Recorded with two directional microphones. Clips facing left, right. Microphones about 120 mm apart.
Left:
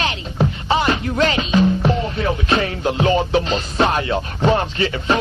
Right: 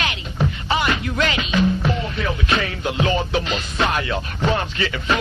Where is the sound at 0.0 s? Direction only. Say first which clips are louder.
Left 3 dB; 30° left (ahead or behind).